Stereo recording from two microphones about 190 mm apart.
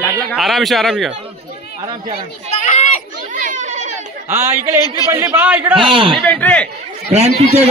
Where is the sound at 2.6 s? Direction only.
40° left (ahead or behind).